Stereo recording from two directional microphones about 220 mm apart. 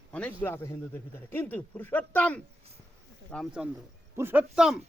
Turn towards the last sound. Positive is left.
turn(degrees=-5)  # may be behind; listen again after turning